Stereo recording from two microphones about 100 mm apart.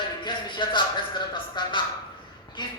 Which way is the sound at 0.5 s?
50° left (ahead or behind).